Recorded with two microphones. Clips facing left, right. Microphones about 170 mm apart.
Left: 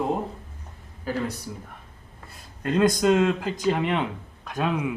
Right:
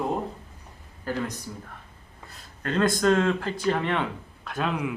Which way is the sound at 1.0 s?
10° left (ahead or behind).